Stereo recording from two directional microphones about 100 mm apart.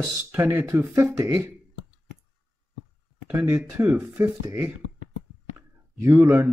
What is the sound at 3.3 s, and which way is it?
Speech, 20° right (ahead or behind).